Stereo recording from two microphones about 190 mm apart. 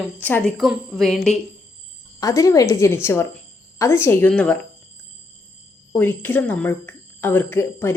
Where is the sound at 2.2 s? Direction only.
15° left (ahead or behind).